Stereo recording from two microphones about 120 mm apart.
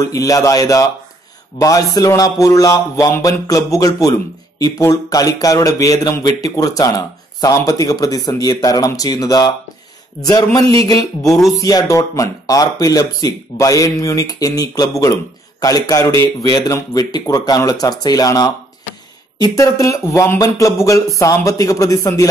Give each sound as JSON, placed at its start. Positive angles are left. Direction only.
{"t": 0.0, "sound": "speech", "side_deg": 30}